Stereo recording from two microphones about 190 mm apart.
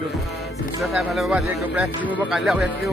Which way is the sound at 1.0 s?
5° right (ahead or behind).